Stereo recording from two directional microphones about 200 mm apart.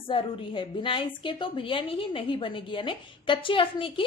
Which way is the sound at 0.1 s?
25° left (ahead or behind).